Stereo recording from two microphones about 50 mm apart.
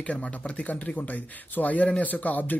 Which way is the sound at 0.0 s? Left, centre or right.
Left.